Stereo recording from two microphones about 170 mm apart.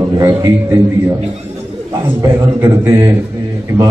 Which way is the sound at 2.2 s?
20° right (ahead or behind).